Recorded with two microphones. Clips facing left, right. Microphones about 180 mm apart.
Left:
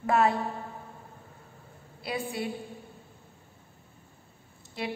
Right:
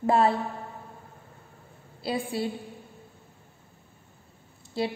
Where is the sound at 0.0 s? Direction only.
30° right (ahead or behind).